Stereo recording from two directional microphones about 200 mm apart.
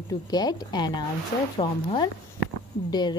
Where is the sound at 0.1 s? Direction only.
20° left (ahead or behind).